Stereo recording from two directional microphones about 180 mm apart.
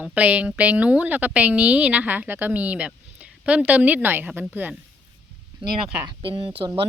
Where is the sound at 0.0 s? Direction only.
5° right (ahead or behind).